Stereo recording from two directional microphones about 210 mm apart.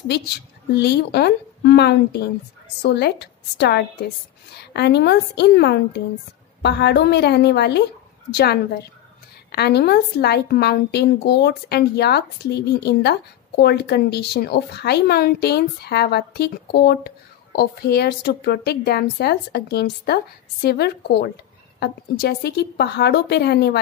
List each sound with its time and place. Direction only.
0.7 s speech: 50° left (ahead or behind)